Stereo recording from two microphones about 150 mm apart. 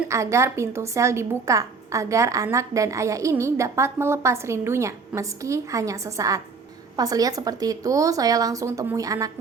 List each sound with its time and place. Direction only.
0.1 s a woman's voice: 20° right (ahead or behind)